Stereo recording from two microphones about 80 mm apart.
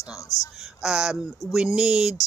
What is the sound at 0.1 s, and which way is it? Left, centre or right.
Speech, left.